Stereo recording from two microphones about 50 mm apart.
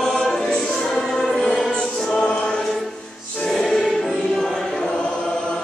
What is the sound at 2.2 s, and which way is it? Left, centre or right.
Choir, centre.